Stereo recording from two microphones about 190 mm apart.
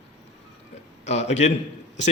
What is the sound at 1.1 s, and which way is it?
Speech, 35° left (ahead or behind).